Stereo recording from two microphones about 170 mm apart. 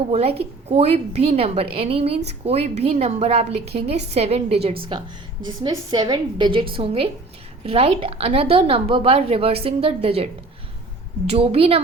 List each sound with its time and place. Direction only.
0.1 s a woman's voice: 35° right (ahead or behind)
11.3 s a woman's voice: 35° right (ahead or behind)